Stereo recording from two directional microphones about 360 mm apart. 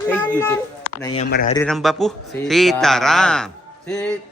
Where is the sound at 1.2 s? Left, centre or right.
Left.